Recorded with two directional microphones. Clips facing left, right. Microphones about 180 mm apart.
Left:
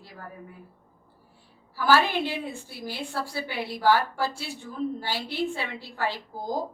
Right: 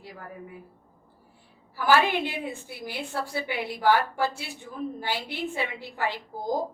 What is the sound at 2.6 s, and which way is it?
A woman's voice, 15° right (ahead or behind).